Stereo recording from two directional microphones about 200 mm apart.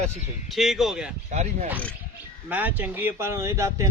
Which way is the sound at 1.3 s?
35° right (ahead or behind).